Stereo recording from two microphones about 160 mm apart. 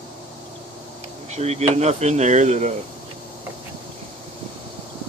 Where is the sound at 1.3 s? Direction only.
40° right (ahead or behind).